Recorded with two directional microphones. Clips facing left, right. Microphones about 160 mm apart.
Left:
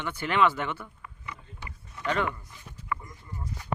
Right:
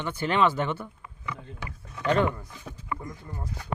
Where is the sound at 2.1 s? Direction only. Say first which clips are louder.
Right 5 dB; 35° right (ahead or behind).